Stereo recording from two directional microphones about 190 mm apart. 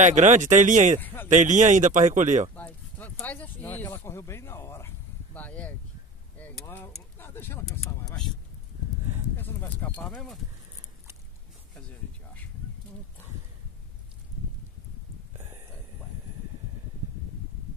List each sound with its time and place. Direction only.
0.0 s speech: 40° right (ahead or behind)
1.0 s speech: 10° left (ahead or behind)
1.3 s speech: 40° right (ahead or behind)
2.5 s a sound: 10° left (ahead or behind)
9.4 s speech: 10° left (ahead or behind)
15.3 s a sound: 35° right (ahead or behind)